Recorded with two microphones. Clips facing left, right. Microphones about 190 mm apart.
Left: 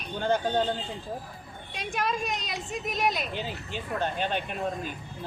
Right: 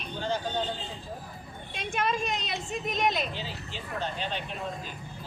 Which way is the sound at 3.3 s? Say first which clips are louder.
Left 4 dB; 55° left (ahead or behind).